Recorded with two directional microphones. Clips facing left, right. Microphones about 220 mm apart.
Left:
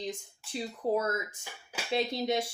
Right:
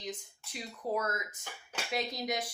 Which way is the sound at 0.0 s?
30° left (ahead or behind).